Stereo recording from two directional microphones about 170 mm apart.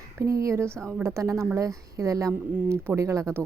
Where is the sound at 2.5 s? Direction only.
5° right (ahead or behind).